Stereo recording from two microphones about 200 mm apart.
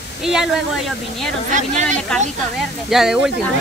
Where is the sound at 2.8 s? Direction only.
Centre (ahead or behind).